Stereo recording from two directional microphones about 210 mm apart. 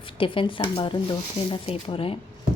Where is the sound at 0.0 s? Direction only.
25° left (ahead or behind).